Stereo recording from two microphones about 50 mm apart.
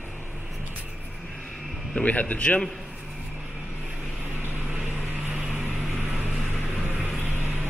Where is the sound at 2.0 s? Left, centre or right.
Left.